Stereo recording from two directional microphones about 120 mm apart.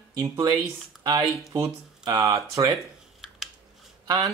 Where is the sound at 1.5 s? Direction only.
35° right (ahead or behind).